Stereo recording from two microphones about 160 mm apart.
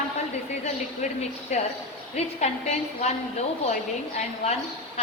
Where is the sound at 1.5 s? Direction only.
45° left (ahead or behind).